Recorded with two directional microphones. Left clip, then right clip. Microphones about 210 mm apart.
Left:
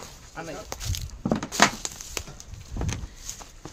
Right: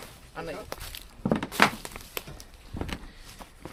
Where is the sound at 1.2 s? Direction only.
15° right (ahead or behind).